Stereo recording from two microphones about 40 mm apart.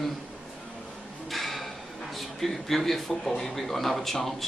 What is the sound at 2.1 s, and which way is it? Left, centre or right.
Speech, centre.